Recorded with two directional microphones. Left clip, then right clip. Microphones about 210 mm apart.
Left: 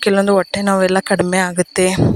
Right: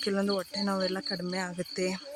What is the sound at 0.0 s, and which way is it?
Speech, 45° left (ahead or behind).